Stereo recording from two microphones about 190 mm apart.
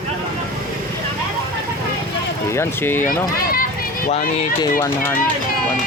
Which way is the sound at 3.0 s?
50° left (ahead or behind).